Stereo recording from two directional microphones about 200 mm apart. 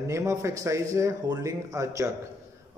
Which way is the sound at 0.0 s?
15° right (ahead or behind).